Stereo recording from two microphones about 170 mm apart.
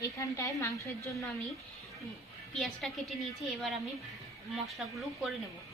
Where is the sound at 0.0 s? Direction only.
20° left (ahead or behind).